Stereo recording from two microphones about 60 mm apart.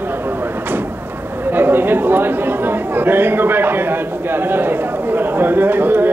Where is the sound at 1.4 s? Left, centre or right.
Right.